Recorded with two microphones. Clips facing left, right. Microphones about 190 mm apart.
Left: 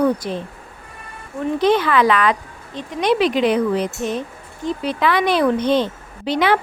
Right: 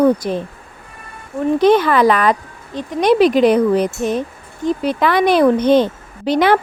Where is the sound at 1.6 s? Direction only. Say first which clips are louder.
Right 4 dB; 45° right (ahead or behind).